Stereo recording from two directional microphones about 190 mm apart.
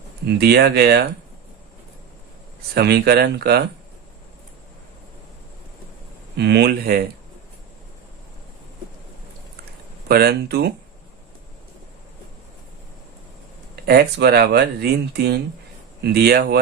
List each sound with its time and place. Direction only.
0.3 s speech: 55° right (ahead or behind)
2.7 s speech: 60° right (ahead or behind)
6.3 s speech: 60° right (ahead or behind)
10.1 s speech: 55° right (ahead or behind)
13.8 s speech: 55° right (ahead or behind)